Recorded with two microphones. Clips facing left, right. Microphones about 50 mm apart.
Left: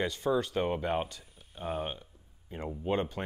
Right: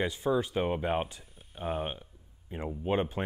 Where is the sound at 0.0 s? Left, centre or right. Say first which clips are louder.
Right 1 dB; centre.